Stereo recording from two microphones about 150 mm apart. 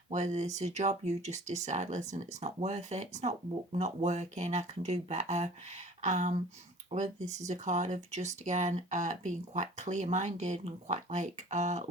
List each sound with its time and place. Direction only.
0.1 s speech: 50° right (ahead or behind)